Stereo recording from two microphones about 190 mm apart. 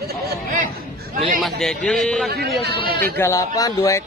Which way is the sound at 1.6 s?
Centre (ahead or behind).